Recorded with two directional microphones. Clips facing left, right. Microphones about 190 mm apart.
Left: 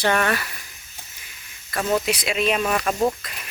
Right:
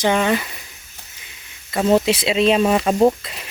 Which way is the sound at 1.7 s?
25° right (ahead or behind).